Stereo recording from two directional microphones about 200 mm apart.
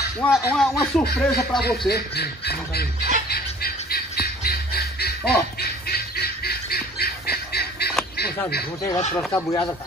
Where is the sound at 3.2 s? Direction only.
50° left (ahead or behind).